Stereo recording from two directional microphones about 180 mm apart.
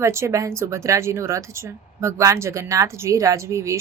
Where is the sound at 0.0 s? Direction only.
15° right (ahead or behind).